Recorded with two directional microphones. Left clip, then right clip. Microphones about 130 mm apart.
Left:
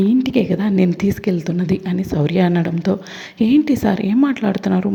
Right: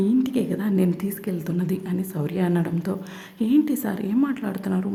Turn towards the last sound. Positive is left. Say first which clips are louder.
# left 9 dB
turn(degrees=35)  # may be behind; listen again after turning